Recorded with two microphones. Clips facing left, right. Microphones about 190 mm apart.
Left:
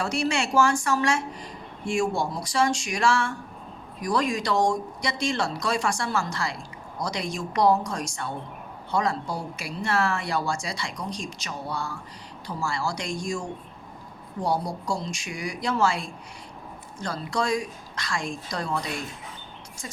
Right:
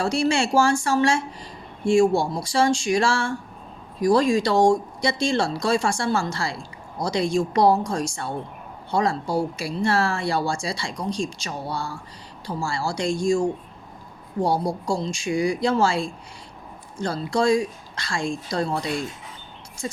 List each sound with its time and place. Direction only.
0.0 s speech: 30° right (ahead or behind)
14.4 s speech: 30° right (ahead or behind)